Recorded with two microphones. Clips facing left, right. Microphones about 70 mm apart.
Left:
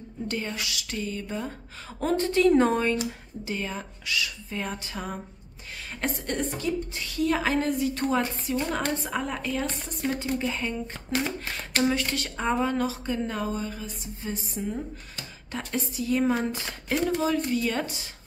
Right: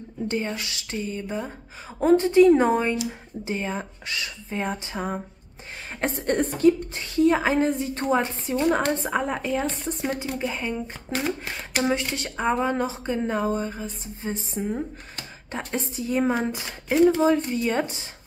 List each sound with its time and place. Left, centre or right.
0.3 s a woman's voice: right
3.1 s a woman's voice: right; by 11.3 s centre
11.4 s a woman's voice: centre
14.6 s speech: right
15.5 s a woman's voice: right
16.9 s speech: centre
17.5 s a woman's voice: right